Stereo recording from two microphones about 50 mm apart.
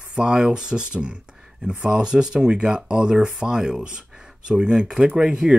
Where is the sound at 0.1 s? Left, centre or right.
Centre.